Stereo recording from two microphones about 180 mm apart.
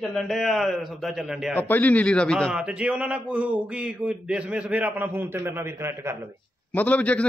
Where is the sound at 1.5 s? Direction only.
10° left (ahead or behind); by 6.2 s 15° right (ahead or behind).